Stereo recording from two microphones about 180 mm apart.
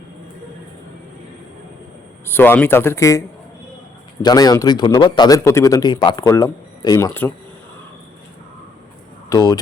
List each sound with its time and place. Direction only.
2.2 s a man's voice: 10° left (ahead or behind)
9.3 s a man's voice: 20° left (ahead or behind)